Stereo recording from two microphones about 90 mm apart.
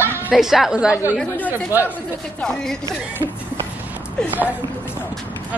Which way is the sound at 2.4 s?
5° left (ahead or behind).